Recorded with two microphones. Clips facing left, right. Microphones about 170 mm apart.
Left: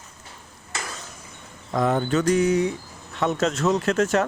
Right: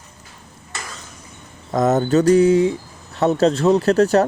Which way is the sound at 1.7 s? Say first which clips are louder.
Right 6 dB; 40° right (ahead or behind).